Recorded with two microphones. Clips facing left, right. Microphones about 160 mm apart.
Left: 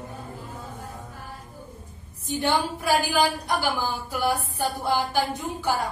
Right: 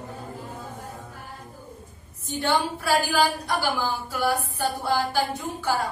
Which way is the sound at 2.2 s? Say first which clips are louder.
Even; 15° left (ahead or behind).